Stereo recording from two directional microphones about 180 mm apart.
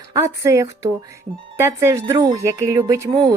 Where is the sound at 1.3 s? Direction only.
30° right (ahead or behind).